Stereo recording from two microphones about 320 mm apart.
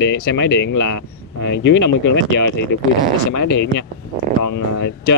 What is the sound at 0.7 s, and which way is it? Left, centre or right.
Speech, left.